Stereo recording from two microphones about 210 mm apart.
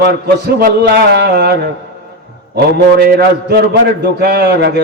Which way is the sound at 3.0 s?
50° right (ahead or behind).